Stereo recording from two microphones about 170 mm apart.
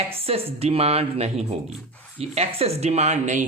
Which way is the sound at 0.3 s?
35° right (ahead or behind).